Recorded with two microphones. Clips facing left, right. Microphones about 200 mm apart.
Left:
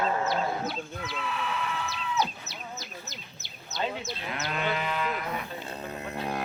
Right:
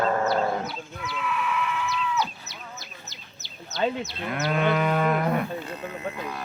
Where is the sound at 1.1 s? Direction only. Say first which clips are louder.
Right 5 dB; 35° left (ahead or behind).